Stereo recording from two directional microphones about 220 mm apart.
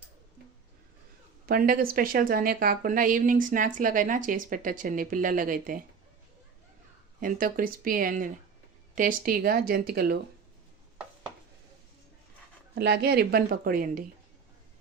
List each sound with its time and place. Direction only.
1.5 s a woman's voice: 40° right (ahead or behind)
7.2 s a woman's voice: 40° right (ahead or behind)
12.7 s a woman's voice: 50° right (ahead or behind)